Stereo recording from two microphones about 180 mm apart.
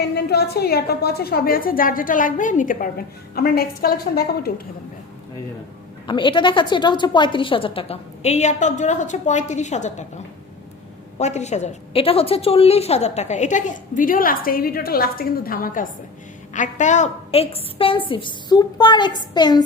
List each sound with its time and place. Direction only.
0.0 s a woman's voice: 65° left (ahead or behind); by 2.9 s 45° left (ahead or behind)
3.3 s a woman's voice: 60° left (ahead or behind)
6.1 s a woman's voice: 25° left (ahead or behind)
11.2 s a woman's voice: 40° left (ahead or behind); by 19.6 s 25° left (ahead or behind)